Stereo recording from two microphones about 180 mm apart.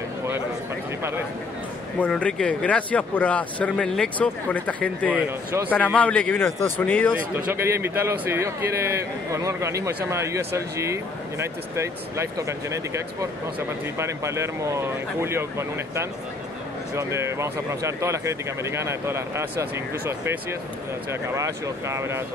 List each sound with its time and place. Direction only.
2.0 s speech: 5° left (ahead or behind)
7.4 s speech: 15° right (ahead or behind)